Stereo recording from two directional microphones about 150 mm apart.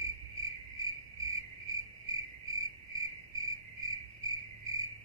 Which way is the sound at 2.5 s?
20° right (ahead or behind).